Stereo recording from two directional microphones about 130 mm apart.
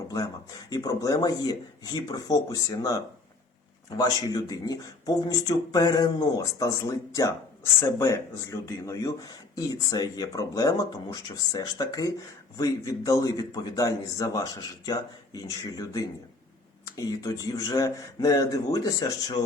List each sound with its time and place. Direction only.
0.7 s speech: 30° left (ahead or behind)